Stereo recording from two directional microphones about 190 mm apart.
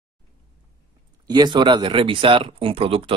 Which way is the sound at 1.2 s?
20° right (ahead or behind).